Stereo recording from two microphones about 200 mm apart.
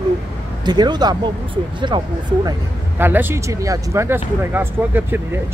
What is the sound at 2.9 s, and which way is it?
Speech, 10° right (ahead or behind).